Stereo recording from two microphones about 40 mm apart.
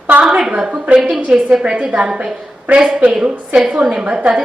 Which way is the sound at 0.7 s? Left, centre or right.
Right.